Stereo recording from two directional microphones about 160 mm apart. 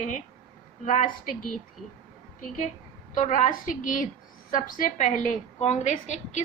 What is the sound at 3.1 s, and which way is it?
A woman's voice, 50° left (ahead or behind).